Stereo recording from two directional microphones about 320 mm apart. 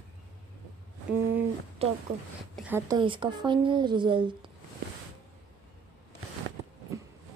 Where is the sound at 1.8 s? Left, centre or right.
Centre.